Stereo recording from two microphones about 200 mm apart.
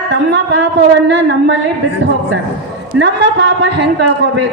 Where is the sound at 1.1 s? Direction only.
65° right (ahead or behind).